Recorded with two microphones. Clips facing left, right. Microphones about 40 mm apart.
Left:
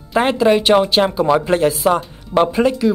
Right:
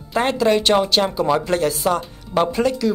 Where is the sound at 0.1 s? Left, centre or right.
Centre.